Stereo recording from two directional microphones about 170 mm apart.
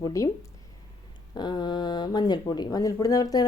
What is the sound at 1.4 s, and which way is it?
A woman's voice, 25° left (ahead or behind).